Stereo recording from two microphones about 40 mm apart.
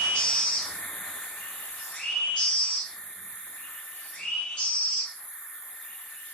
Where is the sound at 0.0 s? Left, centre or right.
Left.